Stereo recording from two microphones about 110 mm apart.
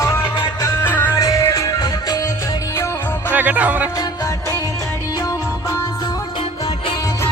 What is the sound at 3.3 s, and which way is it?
Music, 15° right (ahead or behind).